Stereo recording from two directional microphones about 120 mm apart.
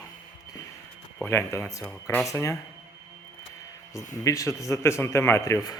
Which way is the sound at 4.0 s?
25° left (ahead or behind).